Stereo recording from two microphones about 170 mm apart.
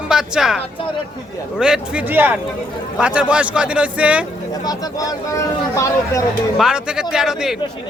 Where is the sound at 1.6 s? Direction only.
5° right (ahead or behind).